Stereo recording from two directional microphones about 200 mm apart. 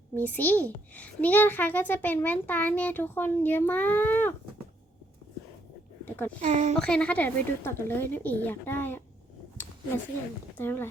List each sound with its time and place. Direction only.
0.2 s a child's voice: 10° left (ahead or behind)
6.1 s a sound: 10° left (ahead or behind)
6.4 s speech: 35° right (ahead or behind)
6.7 s a child's voice: 5° left (ahead or behind)
10.6 s a child's voice: 10° left (ahead or behind)